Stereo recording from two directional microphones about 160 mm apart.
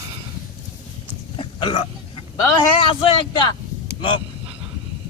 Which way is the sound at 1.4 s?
35° left (ahead or behind).